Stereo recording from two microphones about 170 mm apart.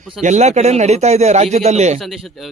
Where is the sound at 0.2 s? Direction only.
40° right (ahead or behind).